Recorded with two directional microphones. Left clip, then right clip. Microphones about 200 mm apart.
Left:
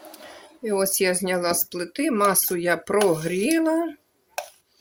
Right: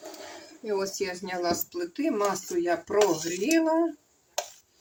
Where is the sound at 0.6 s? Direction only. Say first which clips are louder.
Left 7 dB; 40° left (ahead or behind); by 3.8 s 60° left (ahead or behind).